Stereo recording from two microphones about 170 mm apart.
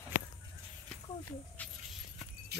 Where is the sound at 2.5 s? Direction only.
75° right (ahead or behind).